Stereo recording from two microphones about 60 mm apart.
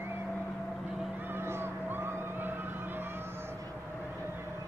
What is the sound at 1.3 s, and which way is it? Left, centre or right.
Vehicle, right.